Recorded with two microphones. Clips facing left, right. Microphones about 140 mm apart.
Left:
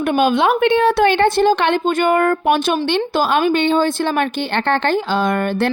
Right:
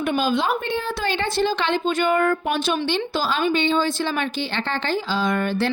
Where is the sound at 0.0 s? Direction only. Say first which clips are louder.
Left 6 dB; 60° left (ahead or behind).